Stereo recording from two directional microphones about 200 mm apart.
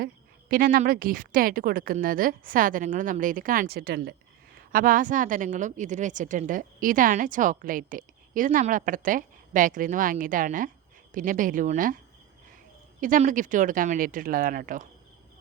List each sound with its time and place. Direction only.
0.0 s a woman's voice: 45° right (ahead or behind)
13.0 s speech: 40° right (ahead or behind)